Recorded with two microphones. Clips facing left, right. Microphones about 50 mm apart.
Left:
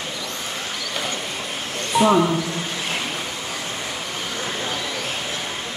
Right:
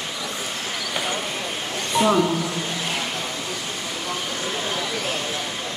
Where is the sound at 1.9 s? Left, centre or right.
Centre.